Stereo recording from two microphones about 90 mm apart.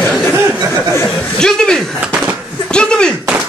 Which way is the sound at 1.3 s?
5° left (ahead or behind).